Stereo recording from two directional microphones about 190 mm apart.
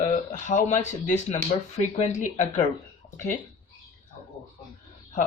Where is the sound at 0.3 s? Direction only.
40° left (ahead or behind).